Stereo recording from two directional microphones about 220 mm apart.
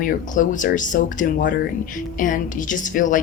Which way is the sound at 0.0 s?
35° left (ahead or behind).